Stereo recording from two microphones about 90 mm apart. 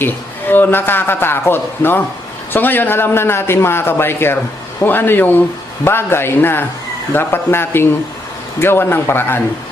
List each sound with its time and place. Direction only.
0.0 s a man's voice: 20° left (ahead or behind)